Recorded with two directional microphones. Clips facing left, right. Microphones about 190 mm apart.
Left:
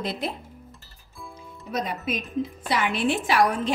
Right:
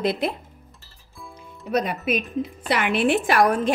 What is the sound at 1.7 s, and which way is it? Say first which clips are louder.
A woman's voice: right 5 dB; 65° right (ahead or behind).